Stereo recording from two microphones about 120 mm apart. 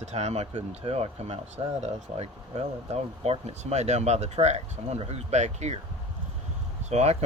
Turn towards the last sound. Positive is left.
turn(degrees=-65)  # may be behind; listen again after turning